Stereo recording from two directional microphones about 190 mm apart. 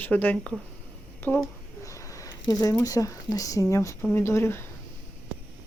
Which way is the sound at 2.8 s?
15° left (ahead or behind).